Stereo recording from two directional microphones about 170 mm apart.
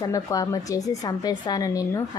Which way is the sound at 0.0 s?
20° left (ahead or behind).